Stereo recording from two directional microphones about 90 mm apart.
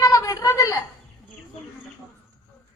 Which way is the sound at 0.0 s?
40° left (ahead or behind).